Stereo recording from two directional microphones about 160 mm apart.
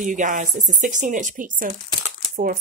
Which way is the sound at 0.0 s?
55° right (ahead or behind).